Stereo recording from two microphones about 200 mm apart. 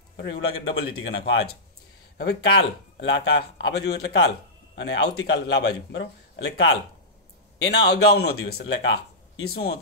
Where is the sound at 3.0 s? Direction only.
65° left (ahead or behind).